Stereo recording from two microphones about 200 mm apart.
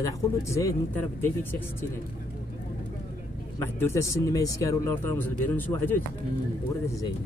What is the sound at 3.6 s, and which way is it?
Speech, 15° left (ahead or behind).